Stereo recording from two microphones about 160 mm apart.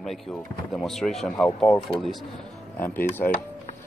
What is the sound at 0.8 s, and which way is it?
Speech, 5° left (ahead or behind).